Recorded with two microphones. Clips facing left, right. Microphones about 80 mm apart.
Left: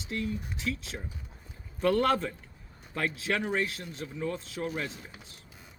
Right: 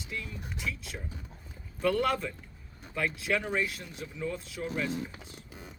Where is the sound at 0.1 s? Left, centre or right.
Left.